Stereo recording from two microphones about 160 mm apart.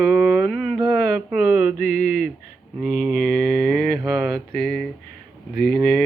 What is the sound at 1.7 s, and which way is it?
Mantra, 50° left (ahead or behind).